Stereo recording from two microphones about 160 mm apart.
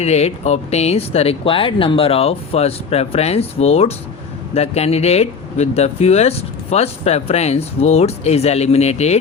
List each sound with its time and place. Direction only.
0.0 s speech: 40° left (ahead or behind)